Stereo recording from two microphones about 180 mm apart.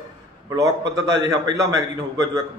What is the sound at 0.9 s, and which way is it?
Speech, 90° right.